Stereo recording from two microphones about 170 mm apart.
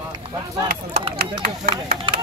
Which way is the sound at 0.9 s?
65° right (ahead or behind).